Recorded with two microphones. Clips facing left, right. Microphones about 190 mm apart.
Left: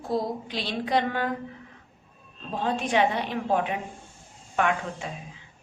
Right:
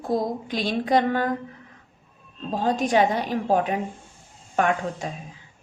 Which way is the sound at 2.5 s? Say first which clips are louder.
Right 4 dB; 40° right (ahead or behind).